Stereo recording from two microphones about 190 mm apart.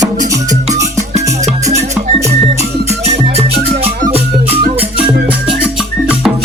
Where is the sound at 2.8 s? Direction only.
35° right (ahead or behind).